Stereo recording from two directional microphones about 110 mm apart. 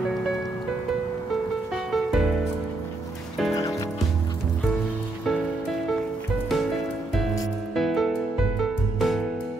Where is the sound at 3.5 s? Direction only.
30° left (ahead or behind).